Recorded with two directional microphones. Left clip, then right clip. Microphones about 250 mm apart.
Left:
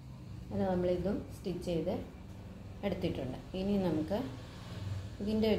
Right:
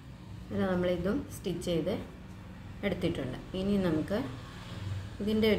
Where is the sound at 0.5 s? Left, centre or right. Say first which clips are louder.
Right 2 dB; right.